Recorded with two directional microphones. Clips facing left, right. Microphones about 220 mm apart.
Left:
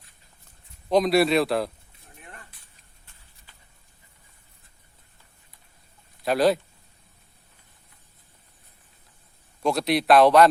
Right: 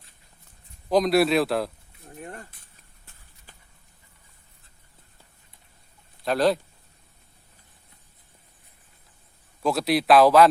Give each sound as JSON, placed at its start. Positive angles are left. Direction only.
{"t": 0.9, "sound": "a man's voice", "side_deg": 0}
{"t": 2.1, "sound": "a sound", "side_deg": -40}
{"t": 6.2, "sound": "a man's voice", "side_deg": 5}
{"t": 9.6, "sound": "a man's voice", "side_deg": 0}